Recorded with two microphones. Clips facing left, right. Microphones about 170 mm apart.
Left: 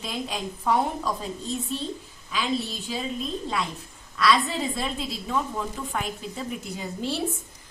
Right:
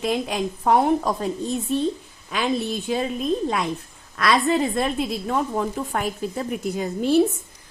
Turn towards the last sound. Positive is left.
turn(degrees=-55)  # may be behind; listen again after turning